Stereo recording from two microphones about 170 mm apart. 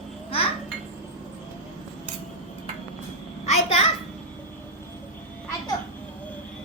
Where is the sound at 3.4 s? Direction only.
40° left (ahead or behind).